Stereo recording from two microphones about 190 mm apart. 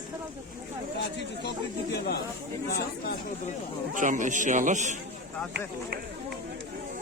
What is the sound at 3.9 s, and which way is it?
A man's voice, 45° right (ahead or behind).